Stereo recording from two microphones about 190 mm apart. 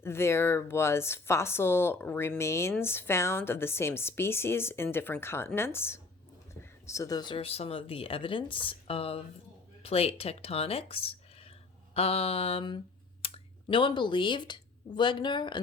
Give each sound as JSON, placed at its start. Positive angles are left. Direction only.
{"t": 0.0, "sound": "speech", "side_deg": 15}
{"t": 11.9, "sound": "mantra", "side_deg": 30}
{"t": 13.2, "sound": "speech", "side_deg": 30}